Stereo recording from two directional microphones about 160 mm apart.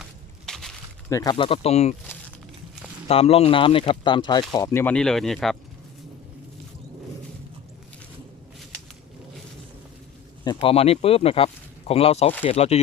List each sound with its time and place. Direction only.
0.0 s a sound: centre (ahead or behind)
1.1 s speech: 25° left (ahead or behind); by 2.0 s 40° left (ahead or behind)
3.1 s speech: 40° left (ahead or behind); by 5.5 s centre (ahead or behind)
10.4 s speech: 30° left (ahead or behind)